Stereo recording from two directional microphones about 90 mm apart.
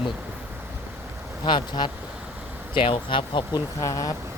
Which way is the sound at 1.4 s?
55° left (ahead or behind).